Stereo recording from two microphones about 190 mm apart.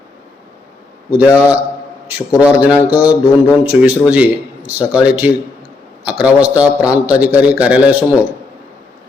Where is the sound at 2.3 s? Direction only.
5° right (ahead or behind).